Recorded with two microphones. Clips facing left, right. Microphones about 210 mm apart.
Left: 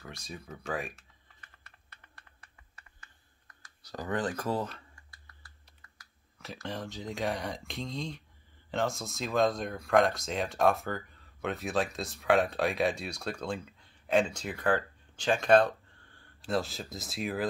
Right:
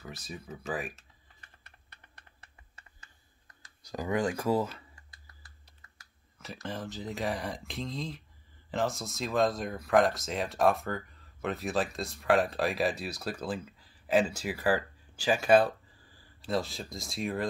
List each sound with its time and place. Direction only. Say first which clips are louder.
0.0 s speech: right 1 dB; centre (ahead or behind)
1.6 s typing: even; 20° right (ahead or behind)
3.6 s speech: right 3 dB; 10° right (ahead or behind)
4.9 s a sound: right 1 dB; 20° right (ahead or behind)
6.3 s speech: even; centre (ahead or behind)